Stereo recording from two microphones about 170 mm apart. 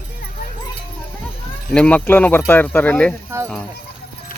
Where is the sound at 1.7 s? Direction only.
5° left (ahead or behind).